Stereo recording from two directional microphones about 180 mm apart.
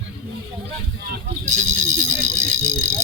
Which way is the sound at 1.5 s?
40° right (ahead or behind).